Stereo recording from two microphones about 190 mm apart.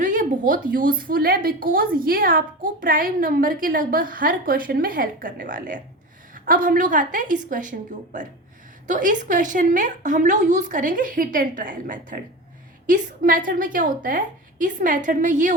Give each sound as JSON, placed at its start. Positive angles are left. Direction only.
{"t": 0.0, "sound": "a woman's voice", "side_deg": -45}